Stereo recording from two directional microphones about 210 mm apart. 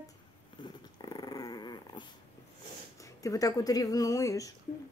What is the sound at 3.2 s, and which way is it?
Speech, 15° left (ahead or behind).